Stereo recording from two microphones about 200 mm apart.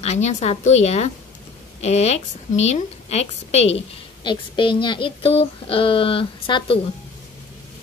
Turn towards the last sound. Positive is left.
turn(degrees=25)  # may be behind; listen again after turning